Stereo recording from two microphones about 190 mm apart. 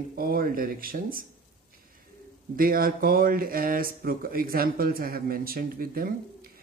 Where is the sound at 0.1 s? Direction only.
50° right (ahead or behind).